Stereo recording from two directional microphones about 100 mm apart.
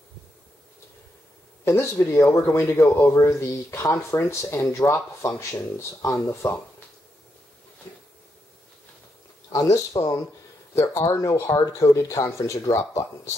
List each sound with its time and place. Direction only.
1.6 s speech: 25° left (ahead or behind)
9.5 s speech: 35° left (ahead or behind)